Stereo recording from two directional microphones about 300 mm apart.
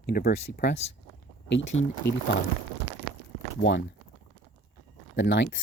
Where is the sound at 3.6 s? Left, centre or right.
Left.